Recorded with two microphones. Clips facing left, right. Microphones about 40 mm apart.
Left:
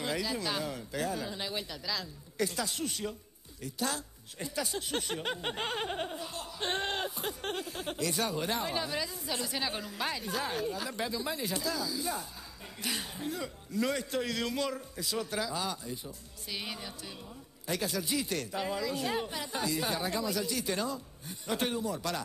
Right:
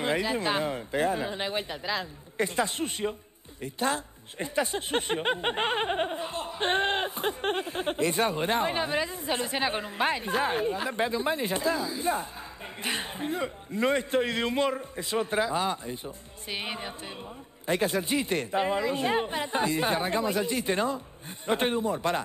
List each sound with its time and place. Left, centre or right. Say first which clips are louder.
0.0 s speech: right 6 dB; right